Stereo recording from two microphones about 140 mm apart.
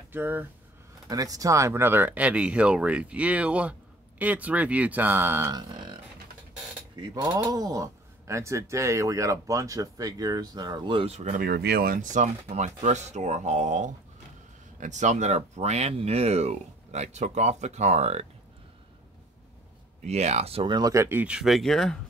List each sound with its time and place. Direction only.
0.1 s speech: 15° right (ahead or behind)
1.0 s speech: 25° right (ahead or behind)
5.6 s a sound: 30° right (ahead or behind)
7.0 s speech: 30° right (ahead or behind); by 11.3 s 45° right (ahead or behind)
11.3 s speech: 90° right; by 12.3 s 65° right (ahead or behind)
12.4 s speech: 55° right (ahead or behind)
20.0 s speech: 50° right (ahead or behind); by 21.9 s centre (ahead or behind)